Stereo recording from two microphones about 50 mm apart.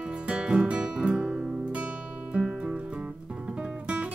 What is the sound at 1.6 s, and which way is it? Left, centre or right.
Music, right.